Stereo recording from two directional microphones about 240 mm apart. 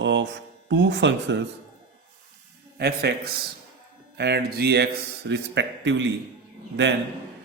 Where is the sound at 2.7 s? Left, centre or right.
Right.